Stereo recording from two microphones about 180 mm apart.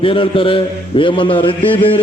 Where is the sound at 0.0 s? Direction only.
30° left (ahead or behind).